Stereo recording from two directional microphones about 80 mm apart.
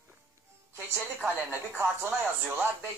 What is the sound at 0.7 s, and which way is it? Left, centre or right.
Speech, right.